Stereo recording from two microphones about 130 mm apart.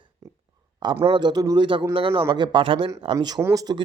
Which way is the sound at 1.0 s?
40° right (ahead or behind).